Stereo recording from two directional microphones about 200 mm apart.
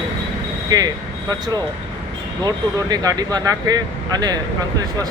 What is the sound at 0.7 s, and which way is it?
Speech, 20° right (ahead or behind).